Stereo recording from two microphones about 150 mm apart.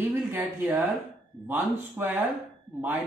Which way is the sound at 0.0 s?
15° right (ahead or behind).